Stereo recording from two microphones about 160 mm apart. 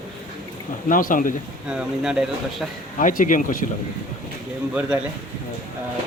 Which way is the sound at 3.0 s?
55° left (ahead or behind).